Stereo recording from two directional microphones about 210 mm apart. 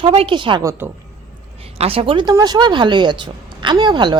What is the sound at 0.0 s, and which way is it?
Speech, 25° right (ahead or behind).